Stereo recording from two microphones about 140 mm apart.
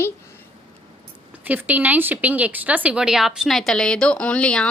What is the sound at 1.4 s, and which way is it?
Speech, 10° right (ahead or behind).